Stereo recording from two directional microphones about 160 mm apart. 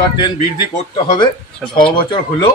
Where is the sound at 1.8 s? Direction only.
30° left (ahead or behind).